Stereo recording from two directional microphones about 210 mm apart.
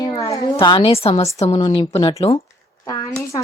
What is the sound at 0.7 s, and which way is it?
Speech, 25° left (ahead or behind).